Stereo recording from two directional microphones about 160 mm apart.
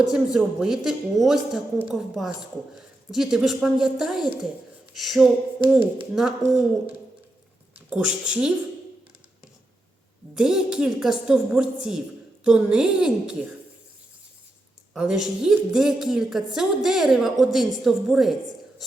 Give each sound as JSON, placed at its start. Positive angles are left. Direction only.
{"t": 0.0, "sound": "a woman's voice", "side_deg": -5}
{"t": 7.9, "sound": "a woman's voice", "side_deg": -5}
{"t": 10.3, "sound": "a woman's voice", "side_deg": -5}
{"t": 14.9, "sound": "a woman's voice", "side_deg": -5}